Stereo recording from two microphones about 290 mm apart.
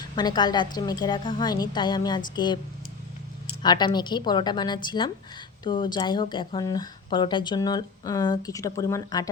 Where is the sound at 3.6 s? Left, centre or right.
Centre.